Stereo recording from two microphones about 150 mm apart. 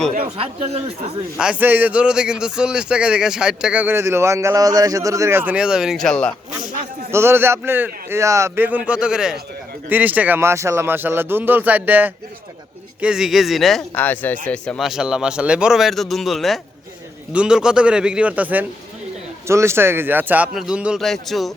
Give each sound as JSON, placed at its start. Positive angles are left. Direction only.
{"t": 0.3, "sound": "speech", "side_deg": -40}
{"t": 1.4, "sound": "speech", "side_deg": -10}
{"t": 7.1, "sound": "speech", "side_deg": -15}
{"t": 13.9, "sound": "speech", "side_deg": 10}